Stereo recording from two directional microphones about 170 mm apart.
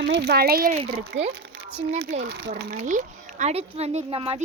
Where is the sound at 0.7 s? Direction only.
35° right (ahead or behind).